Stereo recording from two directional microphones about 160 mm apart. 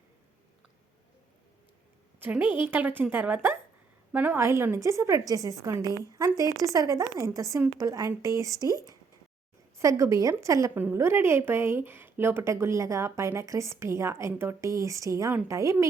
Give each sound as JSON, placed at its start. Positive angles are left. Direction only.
{"t": 2.1, "sound": "a woman's voice", "side_deg": -10}